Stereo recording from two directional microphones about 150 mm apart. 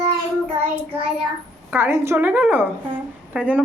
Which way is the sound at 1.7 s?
15° right (ahead or behind).